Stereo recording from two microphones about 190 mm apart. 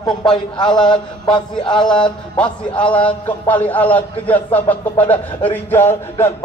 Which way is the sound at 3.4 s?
10° left (ahead or behind).